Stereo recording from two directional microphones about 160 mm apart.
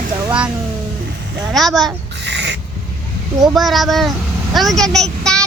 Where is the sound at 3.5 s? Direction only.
Centre (ahead or behind).